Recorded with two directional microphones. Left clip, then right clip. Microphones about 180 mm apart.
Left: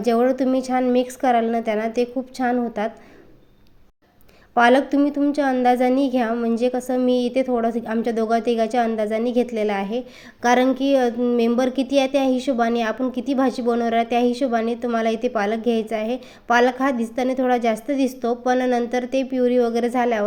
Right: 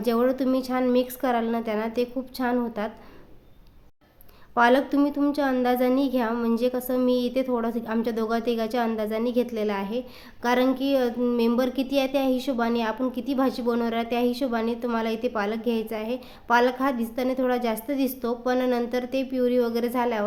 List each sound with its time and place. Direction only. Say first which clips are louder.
0.0 s speech: left 5 dB; 15° left (ahead or behind)
4.5 s speech: left 4 dB; 15° left (ahead or behind)